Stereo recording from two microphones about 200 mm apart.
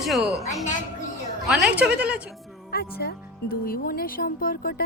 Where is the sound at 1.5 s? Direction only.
5° right (ahead or behind).